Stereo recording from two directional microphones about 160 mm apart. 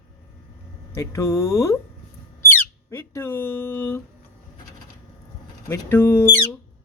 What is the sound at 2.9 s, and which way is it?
Speech, 20° left (ahead or behind).